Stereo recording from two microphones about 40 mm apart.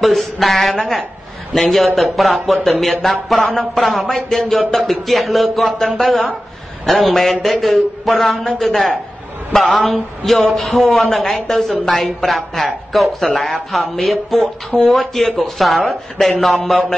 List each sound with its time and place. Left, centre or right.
0.0 s a man's voice: centre
10.4 s a man's voice: centre
11.1 s a man's voice: centre